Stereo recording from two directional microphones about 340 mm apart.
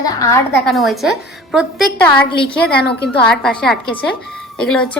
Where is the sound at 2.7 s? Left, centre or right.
Left.